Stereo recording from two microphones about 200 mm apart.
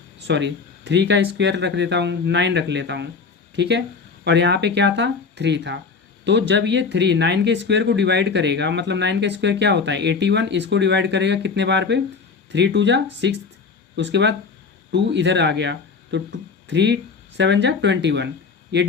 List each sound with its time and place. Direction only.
0.3 s speech: 65° right (ahead or behind)